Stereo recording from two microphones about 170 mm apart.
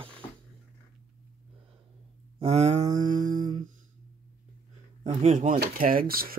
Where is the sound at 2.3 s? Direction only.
40° right (ahead or behind).